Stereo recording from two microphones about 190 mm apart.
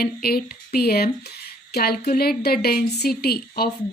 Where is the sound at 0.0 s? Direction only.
55° left (ahead or behind).